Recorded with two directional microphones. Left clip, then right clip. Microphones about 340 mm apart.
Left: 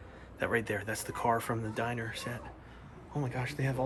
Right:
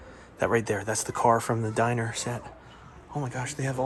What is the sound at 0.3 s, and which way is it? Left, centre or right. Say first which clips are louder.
A man's voice: right 6 dB; centre.